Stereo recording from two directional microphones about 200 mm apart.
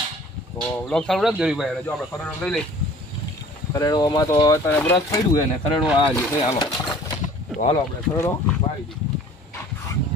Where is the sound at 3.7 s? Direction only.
20° left (ahead or behind).